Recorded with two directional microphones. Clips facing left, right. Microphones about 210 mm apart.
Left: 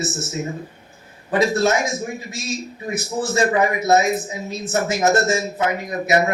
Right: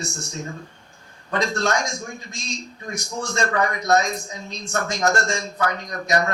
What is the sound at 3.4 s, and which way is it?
Speech, 20° left (ahead or behind).